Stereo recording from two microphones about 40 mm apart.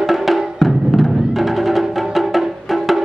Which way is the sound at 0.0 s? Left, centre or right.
Centre.